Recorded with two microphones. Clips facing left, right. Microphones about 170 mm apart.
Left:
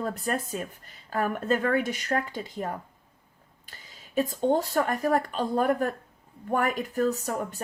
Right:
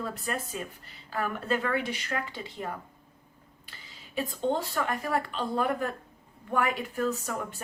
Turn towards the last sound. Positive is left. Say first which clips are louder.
# left 4 dB
turn(degrees=40)  # may be behind; listen again after turning